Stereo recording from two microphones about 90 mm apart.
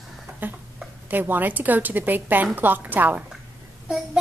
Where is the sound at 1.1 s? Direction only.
20° right (ahead or behind).